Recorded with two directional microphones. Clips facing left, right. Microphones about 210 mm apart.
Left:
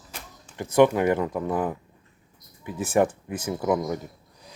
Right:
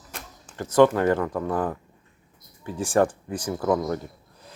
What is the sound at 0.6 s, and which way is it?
Speech, 15° left (ahead or behind).